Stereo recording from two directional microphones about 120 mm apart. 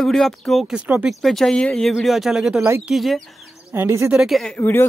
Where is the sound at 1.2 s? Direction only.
5° left (ahead or behind).